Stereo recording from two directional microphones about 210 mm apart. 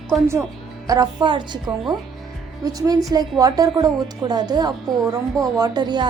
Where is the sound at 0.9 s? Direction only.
20° right (ahead or behind).